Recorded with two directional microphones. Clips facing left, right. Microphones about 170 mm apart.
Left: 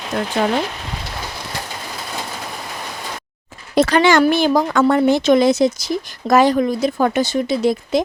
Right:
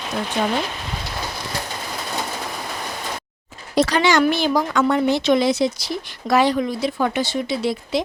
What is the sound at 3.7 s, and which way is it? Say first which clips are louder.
A woman's voice: left 4 dB; 55° left (ahead or behind).